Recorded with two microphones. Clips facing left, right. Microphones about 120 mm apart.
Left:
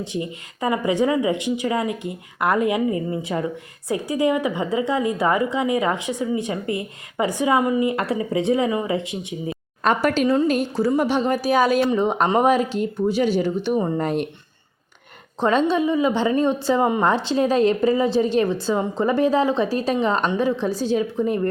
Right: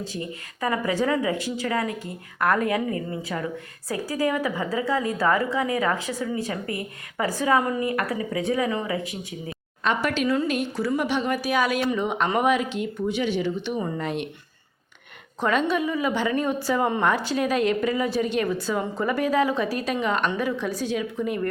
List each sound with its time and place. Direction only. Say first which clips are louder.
0.0 s a woman's voice: left 5 dB; 20° left (ahead or behind)
9.8 s speech: left 5 dB; 45° left (ahead or behind)
15.4 s a woman's voice: left 4 dB; 30° left (ahead or behind)